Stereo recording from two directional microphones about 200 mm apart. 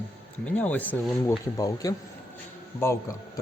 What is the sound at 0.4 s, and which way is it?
Speech, 5° left (ahead or behind).